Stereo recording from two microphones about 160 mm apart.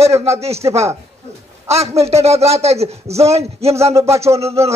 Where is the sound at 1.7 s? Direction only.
40° right (ahead or behind).